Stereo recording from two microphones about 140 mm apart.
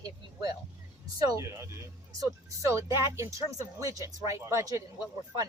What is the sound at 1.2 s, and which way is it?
Speech, 25° right (ahead or behind).